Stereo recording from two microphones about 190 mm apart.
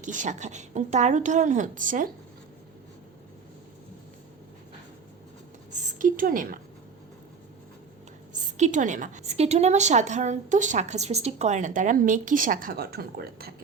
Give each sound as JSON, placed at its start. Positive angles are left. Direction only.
{"t": 0.0, "sound": "a woman's voice", "side_deg": -40}
{"t": 6.0, "sound": "a woman's voice", "side_deg": -45}
{"t": 8.3, "sound": "a woman's voice", "side_deg": -40}